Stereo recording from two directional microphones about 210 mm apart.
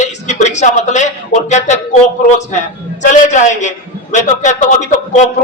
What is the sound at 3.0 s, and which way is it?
A man's voice, 35° left (ahead or behind).